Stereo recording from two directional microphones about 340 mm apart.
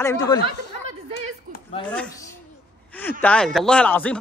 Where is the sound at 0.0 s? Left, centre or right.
Centre.